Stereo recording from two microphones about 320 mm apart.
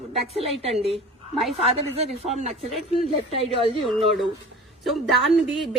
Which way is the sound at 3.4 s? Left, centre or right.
Centre.